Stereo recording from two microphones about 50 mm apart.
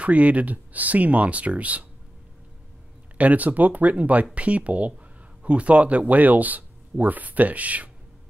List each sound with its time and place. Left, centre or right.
0.0 s speech: right
3.2 s speech: right